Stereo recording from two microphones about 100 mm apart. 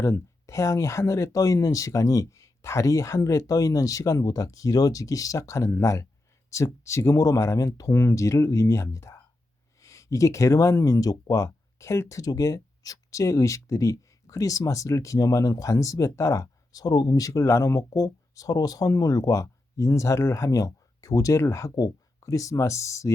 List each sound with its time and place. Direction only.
0.0 s speech: 30° left (ahead or behind)